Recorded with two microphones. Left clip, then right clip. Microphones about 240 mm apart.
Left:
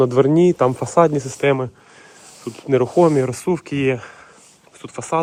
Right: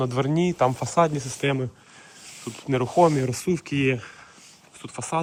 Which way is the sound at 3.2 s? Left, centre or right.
Centre.